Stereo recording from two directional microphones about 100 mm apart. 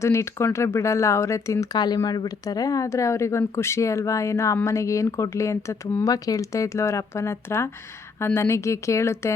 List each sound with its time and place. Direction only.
0.0 s speech: 30° left (ahead or behind)
1.7 s speech: 45° left (ahead or behind); by 9.3 s 30° left (ahead or behind)